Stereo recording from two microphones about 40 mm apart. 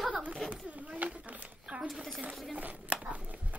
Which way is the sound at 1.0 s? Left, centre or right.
Right.